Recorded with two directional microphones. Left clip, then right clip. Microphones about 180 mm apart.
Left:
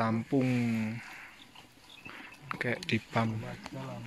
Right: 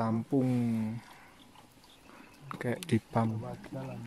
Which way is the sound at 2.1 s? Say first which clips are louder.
Left 5 dB; 15° right (ahead or behind).